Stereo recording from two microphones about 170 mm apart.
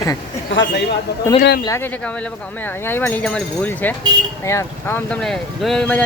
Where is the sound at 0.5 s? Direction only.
90° left.